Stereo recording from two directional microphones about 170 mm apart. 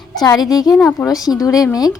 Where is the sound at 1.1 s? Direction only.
20° left (ahead or behind).